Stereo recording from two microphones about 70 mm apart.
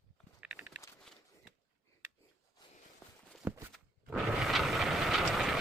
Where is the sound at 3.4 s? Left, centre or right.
Right.